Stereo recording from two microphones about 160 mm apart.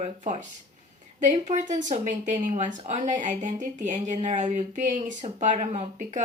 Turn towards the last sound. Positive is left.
turn(degrees=-45)  # may be behind; listen again after turning